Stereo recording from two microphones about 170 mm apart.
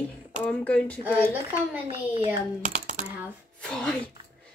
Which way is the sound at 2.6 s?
45° right (ahead or behind).